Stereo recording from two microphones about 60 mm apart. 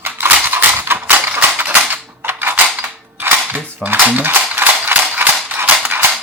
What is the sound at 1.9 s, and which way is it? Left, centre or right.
Typewriter, right.